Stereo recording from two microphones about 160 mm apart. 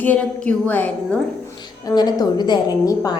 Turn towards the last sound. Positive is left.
turn(degrees=20)  # may be behind; listen again after turning